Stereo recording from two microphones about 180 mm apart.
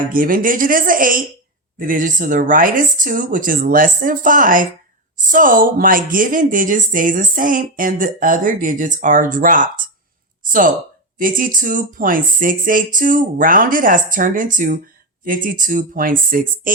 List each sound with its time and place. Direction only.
0.1 s a woman's voice: 50° right (ahead or behind)